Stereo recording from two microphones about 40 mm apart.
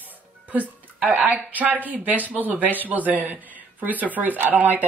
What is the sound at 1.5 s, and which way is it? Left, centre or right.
Speech, right.